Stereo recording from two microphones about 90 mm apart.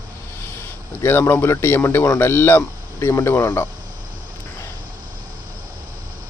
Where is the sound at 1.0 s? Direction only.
25° left (ahead or behind).